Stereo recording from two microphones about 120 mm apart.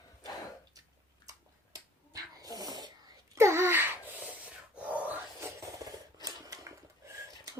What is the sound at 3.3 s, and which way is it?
Wail, 20° right (ahead or behind).